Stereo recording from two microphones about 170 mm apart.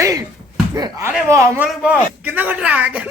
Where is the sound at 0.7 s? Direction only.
15° right (ahead or behind).